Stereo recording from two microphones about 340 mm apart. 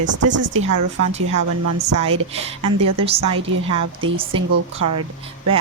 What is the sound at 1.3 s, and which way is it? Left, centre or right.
Speech, right.